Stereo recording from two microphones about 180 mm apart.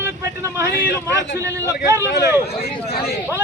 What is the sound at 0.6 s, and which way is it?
Speech, 65° left (ahead or behind).